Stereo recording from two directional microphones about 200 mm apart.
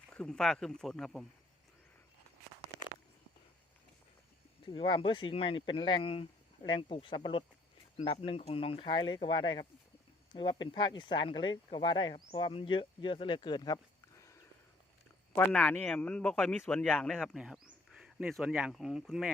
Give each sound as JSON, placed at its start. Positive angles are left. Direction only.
{"t": 0.1, "sound": "a man's voice", "side_deg": 5}
{"t": 4.6, "sound": "speech", "side_deg": 25}
{"t": 15.4, "sound": "a man's voice", "side_deg": 10}